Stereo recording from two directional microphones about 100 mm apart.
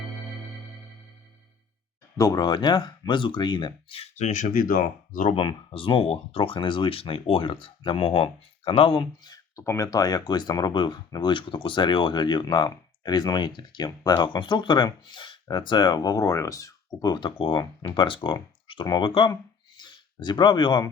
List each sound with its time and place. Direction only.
2.1 s speech: 35° left (ahead or behind)
5.3 s speech: 60° left (ahead or behind); by 9.6 s 40° left (ahead or behind)
9.6 s speech: 30° left (ahead or behind); by 20.8 s 50° left (ahead or behind)